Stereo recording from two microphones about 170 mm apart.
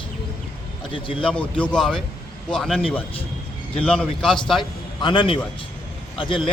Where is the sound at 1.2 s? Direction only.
5° left (ahead or behind).